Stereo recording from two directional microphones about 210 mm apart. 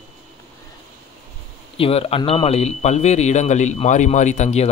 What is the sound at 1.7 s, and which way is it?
Speech, 25° left (ahead or behind).